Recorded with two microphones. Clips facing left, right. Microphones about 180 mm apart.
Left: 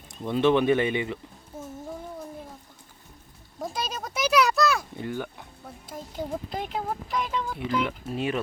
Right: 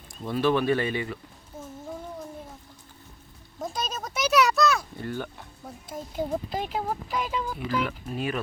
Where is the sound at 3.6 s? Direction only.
Centre (ahead or behind).